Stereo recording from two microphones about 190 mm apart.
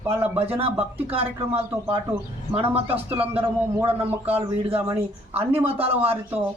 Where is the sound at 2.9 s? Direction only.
30° right (ahead or behind).